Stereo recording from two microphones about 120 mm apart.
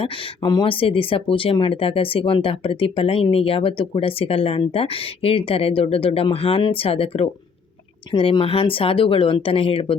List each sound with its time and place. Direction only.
0.4 s speech: 40° left (ahead or behind)